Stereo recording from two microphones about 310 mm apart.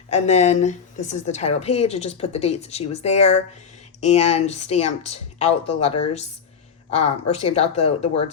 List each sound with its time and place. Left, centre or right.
0.1 s a woman's voice: left
6.9 s a woman's voice: left